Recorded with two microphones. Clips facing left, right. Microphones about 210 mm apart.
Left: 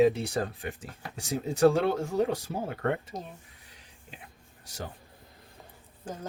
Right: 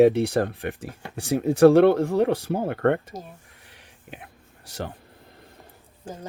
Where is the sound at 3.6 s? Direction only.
65° right (ahead or behind).